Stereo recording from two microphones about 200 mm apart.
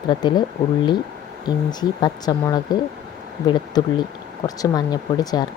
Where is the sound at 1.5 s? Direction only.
20° left (ahead or behind).